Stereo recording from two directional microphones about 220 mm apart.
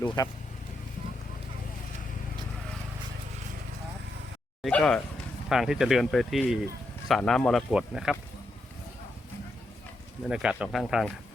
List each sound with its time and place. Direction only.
0.2 s speech: 20° left (ahead or behind)
4.6 s speech: 5° left (ahead or behind)
10.2 s speech: 5° right (ahead or behind)